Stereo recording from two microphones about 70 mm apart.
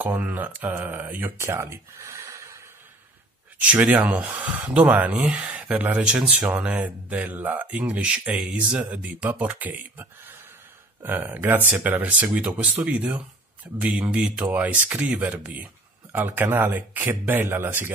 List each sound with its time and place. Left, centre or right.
0.0 s speech: right
1.4 s speech: right
3.6 s speech: right
6.0 s speech: centre
6.5 s speech: right